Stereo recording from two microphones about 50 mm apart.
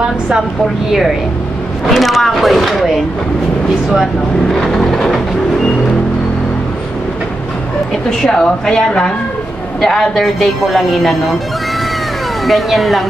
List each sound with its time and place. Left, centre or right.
1.9 s a woman's voice: centre
4.6 s vehicle: centre
8.1 s vehicle: centre
9.8 s a woman's voice: centre
12.4 s a woman's voice: centre